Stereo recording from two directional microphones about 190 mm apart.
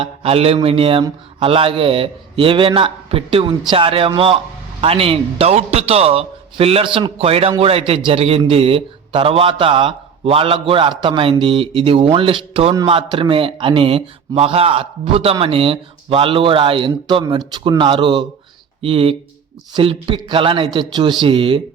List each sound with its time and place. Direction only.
0.0 s a man's voice: 30° right (ahead or behind)